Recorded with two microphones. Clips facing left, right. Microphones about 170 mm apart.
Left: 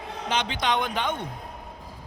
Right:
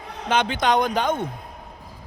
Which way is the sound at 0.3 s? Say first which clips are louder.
Right 6 dB; 50° right (ahead or behind).